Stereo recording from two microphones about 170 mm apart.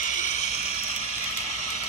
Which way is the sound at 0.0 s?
45° left (ahead or behind).